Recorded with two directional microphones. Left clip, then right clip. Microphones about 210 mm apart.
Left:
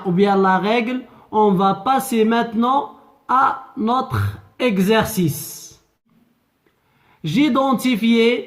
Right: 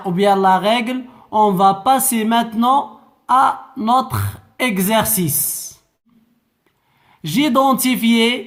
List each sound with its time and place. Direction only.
0.1 s speech: 25° right (ahead or behind)
7.1 s speech: 30° right (ahead or behind)